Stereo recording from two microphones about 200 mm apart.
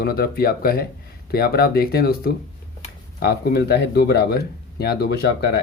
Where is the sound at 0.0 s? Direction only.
50° left (ahead or behind).